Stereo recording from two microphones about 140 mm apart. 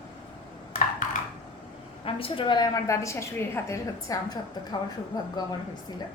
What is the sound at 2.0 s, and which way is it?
A woman's voice, 40° left (ahead or behind).